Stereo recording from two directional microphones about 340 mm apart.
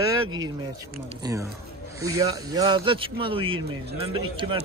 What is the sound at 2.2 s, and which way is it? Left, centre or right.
A man's voice, centre.